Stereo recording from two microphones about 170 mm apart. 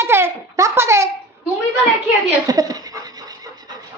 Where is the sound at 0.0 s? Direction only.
15° right (ahead or behind).